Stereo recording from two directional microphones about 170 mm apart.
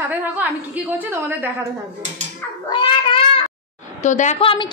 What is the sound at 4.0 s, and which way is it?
Speech, 45° left (ahead or behind).